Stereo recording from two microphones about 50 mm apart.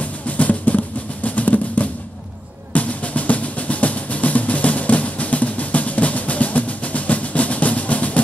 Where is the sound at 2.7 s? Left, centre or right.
Left.